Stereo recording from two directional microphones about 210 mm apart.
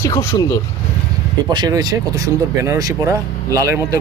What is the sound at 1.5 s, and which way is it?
Speech, 20° right (ahead or behind).